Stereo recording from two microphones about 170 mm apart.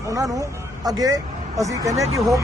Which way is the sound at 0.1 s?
20° right (ahead or behind).